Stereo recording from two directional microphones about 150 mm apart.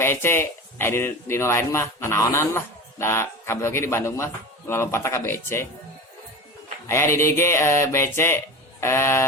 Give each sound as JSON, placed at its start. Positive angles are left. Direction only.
{"t": 0.0, "sound": "speech", "side_deg": 15}
{"t": 6.8, "sound": "speech", "side_deg": 15}